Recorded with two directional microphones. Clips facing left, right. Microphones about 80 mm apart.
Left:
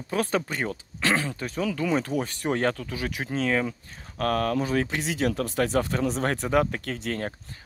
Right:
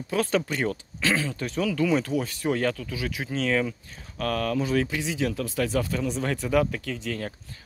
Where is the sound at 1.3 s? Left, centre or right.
Left.